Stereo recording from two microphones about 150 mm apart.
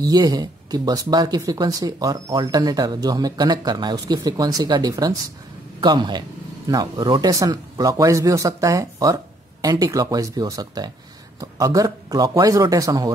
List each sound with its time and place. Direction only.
0.0 s a man's voice: 25° right (ahead or behind)